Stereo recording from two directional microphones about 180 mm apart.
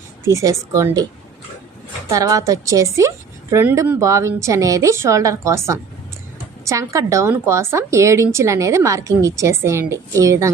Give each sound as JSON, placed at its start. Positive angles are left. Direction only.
{"t": 0.3, "sound": "a woman's voice", "side_deg": -15}
{"t": 2.0, "sound": "a woman's voice", "side_deg": -20}